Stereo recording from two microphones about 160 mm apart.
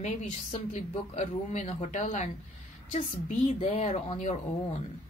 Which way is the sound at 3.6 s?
40° left (ahead or behind).